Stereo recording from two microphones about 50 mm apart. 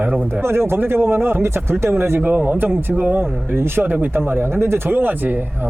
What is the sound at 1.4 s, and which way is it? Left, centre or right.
Speech, right.